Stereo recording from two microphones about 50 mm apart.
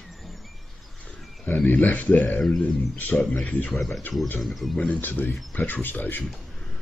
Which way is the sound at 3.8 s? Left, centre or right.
Centre.